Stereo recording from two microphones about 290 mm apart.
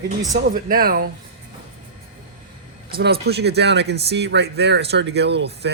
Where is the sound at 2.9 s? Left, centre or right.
Right.